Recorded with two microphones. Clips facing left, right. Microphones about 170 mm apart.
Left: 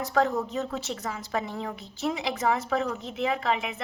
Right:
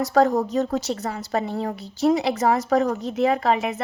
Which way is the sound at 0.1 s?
40° right (ahead or behind).